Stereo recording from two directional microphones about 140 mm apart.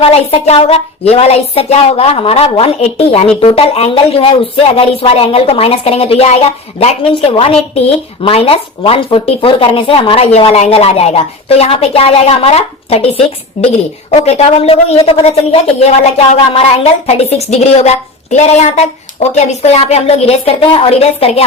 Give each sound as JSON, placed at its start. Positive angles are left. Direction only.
{"t": 0.0, "sound": "speech", "side_deg": 45}